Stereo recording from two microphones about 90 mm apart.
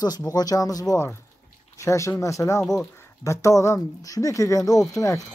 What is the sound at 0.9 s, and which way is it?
Speech, 30° left (ahead or behind).